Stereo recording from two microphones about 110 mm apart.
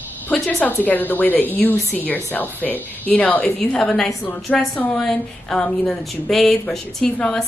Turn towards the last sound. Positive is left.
turn(degrees=5)  # may be behind; listen again after turning